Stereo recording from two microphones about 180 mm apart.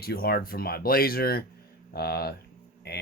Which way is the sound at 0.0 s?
60° left (ahead or behind).